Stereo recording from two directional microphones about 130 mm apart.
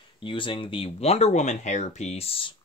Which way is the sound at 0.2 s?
40° left (ahead or behind).